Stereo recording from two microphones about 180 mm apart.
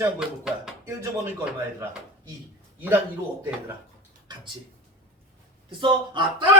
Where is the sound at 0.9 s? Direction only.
15° right (ahead or behind).